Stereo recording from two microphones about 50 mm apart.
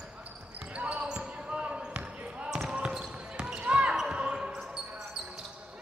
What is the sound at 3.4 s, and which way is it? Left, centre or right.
Basketball bounce, right.